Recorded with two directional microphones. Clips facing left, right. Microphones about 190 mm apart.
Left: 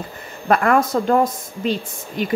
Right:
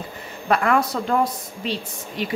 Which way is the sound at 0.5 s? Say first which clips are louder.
Left 3 dB; 45° left (ahead or behind).